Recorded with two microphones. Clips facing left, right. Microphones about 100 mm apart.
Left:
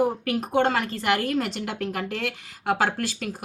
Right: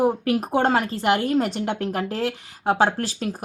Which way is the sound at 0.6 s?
30° right (ahead or behind).